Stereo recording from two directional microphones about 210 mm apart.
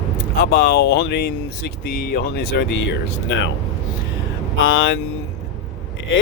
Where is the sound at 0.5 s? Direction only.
50° left (ahead or behind).